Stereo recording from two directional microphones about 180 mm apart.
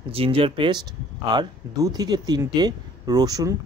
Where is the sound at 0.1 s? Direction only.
30° right (ahead or behind).